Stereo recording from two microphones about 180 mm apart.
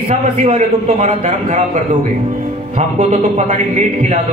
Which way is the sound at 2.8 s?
40° right (ahead or behind).